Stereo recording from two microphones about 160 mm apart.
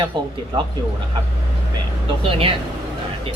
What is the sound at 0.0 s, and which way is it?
Speech, 30° right (ahead or behind).